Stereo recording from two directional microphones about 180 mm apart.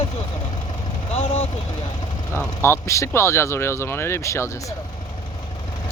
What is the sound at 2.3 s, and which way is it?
Speech, 15° left (ahead or behind).